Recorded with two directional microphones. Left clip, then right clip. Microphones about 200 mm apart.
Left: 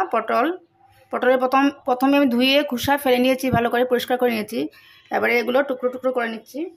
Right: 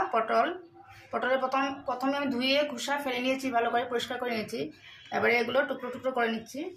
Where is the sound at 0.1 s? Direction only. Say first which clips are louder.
Left 6 dB; 60° left (ahead or behind).